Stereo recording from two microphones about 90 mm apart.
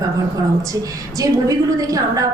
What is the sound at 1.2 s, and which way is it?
A woman's voice, 40° right (ahead or behind).